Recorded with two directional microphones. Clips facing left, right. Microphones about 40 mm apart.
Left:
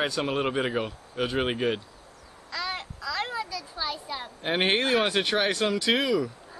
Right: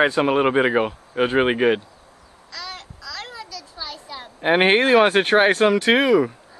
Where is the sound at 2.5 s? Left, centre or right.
Left.